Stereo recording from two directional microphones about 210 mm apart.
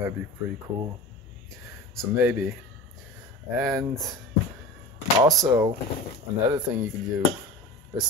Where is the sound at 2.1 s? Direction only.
10° right (ahead or behind).